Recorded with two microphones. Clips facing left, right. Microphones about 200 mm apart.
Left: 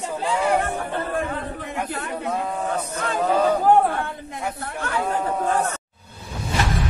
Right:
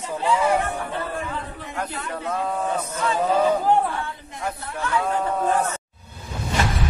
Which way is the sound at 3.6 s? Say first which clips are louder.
Left 3 dB; 50° left (ahead or behind).